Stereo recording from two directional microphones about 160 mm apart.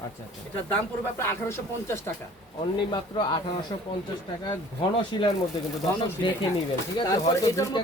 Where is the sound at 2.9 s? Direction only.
30° left (ahead or behind).